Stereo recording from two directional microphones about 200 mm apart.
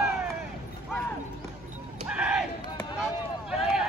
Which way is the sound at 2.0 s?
5° right (ahead or behind).